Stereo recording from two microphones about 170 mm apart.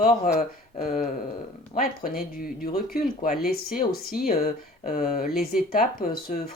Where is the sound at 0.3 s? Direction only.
55° left (ahead or behind).